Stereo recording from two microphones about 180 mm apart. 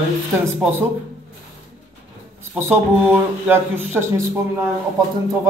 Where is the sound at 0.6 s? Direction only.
10° right (ahead or behind).